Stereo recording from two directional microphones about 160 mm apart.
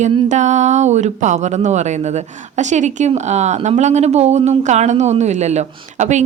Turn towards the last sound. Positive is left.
turn(degrees=-45)  # may be behind; listen again after turning